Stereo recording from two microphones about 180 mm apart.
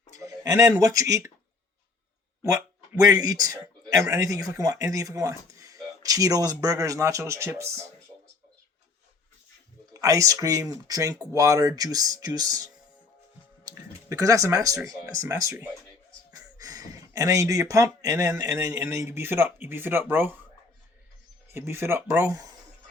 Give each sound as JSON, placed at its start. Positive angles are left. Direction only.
{"t": 0.2, "sound": "speech", "side_deg": -20}
{"t": 2.4, "sound": "a sound", "side_deg": -15}
{"t": 3.2, "sound": "speech", "side_deg": -20}
{"t": 9.9, "sound": "speech", "side_deg": -20}
{"t": 21.5, "sound": "speech", "side_deg": -15}